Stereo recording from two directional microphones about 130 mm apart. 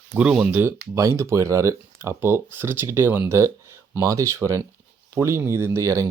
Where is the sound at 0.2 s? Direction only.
10° right (ahead or behind).